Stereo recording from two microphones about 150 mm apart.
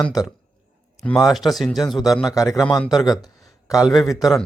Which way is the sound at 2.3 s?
20° left (ahead or behind).